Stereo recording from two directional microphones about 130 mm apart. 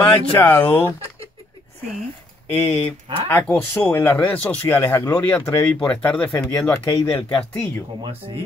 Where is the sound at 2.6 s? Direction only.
15° left (ahead or behind).